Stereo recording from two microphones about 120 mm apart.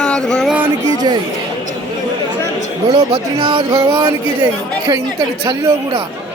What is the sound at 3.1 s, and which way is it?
Speech, 50° right (ahead or behind).